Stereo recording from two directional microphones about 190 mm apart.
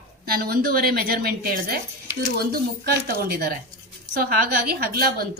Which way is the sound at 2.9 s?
55° right (ahead or behind).